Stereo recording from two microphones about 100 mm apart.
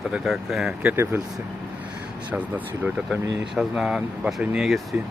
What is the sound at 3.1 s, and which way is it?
Speech, 5° right (ahead or behind).